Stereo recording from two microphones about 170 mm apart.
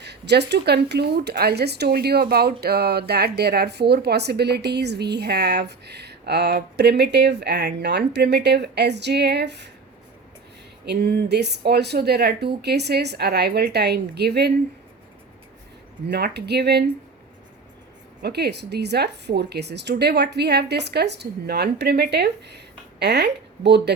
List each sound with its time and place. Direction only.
0.0 s speech: 80° right
10.8 s speech: 75° right (ahead or behind)
16.0 s speech: 75° right (ahead or behind)
18.2 s a woman's voice: 75° right (ahead or behind)